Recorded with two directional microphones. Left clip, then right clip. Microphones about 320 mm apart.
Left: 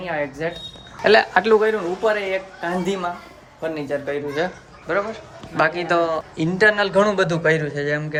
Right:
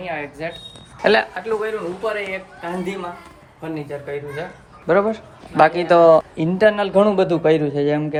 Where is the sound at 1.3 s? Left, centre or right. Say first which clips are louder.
Left 8 dB; left.